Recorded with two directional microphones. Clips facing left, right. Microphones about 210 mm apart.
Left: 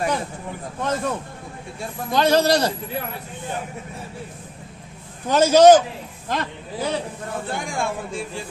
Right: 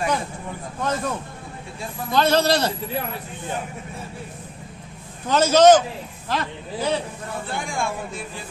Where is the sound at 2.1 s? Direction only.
15° left (ahead or behind).